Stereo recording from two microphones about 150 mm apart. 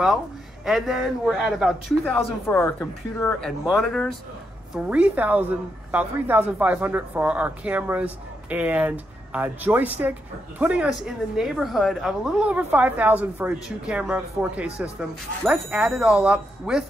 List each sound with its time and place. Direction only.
0.7 s a man's voice: centre (ahead or behind)
2.4 s speech: 15° left (ahead or behind)
3.3 s a man's voice: 5° left (ahead or behind)